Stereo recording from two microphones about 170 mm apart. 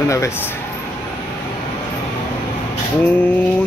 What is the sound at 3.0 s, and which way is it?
Speech, 10° left (ahead or behind).